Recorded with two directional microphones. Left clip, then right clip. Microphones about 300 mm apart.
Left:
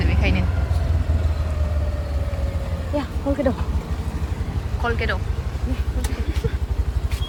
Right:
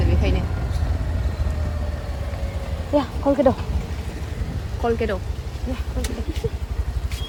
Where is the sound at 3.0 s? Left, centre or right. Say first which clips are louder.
Right 5 dB; right.